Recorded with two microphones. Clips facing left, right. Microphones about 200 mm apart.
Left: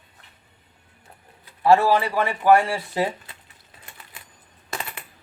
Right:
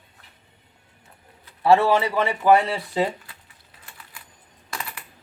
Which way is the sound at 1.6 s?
25° right (ahead or behind).